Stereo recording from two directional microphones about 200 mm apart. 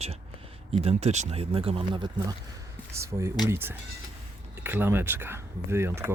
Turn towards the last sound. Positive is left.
turn(degrees=-10)  # may be behind; listen again after turning